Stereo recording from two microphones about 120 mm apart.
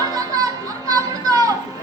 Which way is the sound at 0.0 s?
30° right (ahead or behind).